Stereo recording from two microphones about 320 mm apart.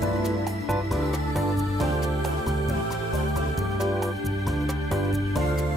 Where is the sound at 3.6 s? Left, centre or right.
Centre.